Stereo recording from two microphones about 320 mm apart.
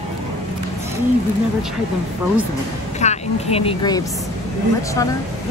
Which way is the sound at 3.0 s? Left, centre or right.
Centre.